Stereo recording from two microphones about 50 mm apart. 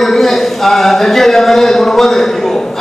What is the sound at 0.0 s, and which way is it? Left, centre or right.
A man's voice, centre.